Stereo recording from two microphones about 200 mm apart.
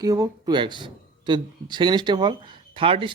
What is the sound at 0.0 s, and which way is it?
Speech, 15° right (ahead or behind).